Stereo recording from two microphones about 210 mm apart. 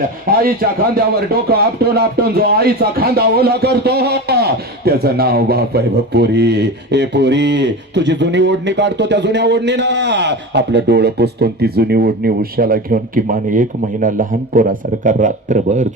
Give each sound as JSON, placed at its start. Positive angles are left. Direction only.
{"t": 0.3, "sound": "a man's voice", "side_deg": -45}